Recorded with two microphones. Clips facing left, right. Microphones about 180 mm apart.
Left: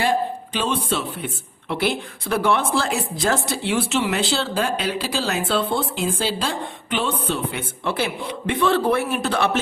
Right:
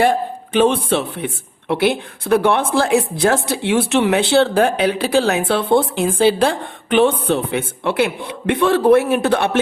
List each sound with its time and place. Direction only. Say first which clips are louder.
0.0 s speech: right 5 dB; 60° right (ahead or behind)